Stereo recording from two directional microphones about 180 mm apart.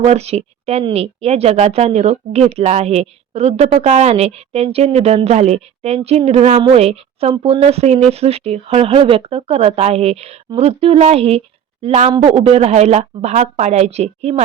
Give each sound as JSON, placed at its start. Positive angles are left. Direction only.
{"t": 0.0, "sound": "a woman's voice", "side_deg": -35}